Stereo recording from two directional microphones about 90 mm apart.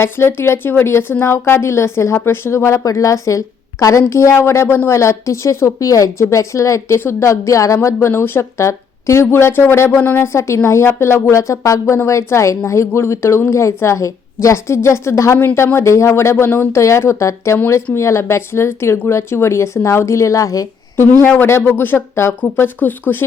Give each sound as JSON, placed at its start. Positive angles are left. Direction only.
{"t": 0.0, "sound": "a woman's voice", "side_deg": 25}
{"t": 8.0, "sound": "speech", "side_deg": 25}
{"t": 21.2, "sound": "a woman's voice", "side_deg": 25}